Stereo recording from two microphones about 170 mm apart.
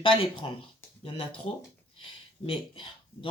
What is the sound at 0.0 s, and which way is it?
Speech, 30° left (ahead or behind).